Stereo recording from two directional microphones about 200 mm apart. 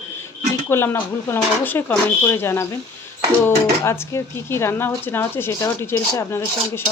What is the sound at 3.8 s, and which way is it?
Speech, 15° left (ahead or behind).